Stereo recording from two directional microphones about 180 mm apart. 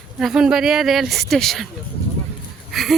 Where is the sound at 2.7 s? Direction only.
Centre (ahead or behind).